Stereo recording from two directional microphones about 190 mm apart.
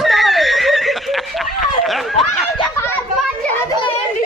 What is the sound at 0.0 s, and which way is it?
Snicker, centre (ahead or behind).